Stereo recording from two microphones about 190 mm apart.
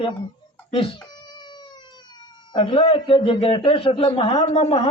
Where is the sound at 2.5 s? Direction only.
25° left (ahead or behind).